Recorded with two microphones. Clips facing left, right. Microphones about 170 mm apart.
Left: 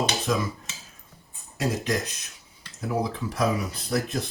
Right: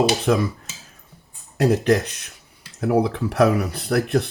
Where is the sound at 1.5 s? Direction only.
65° right (ahead or behind).